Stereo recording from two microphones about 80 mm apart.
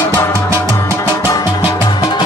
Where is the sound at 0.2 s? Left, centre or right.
Left.